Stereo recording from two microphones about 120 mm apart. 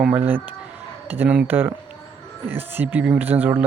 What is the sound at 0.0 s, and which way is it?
Speech, 15° right (ahead or behind).